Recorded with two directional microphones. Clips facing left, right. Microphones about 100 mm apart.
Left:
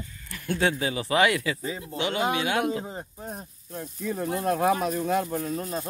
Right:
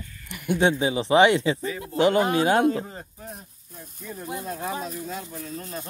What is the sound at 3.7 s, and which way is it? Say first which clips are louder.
Speech: left 8 dB; 65° left (ahead or behind).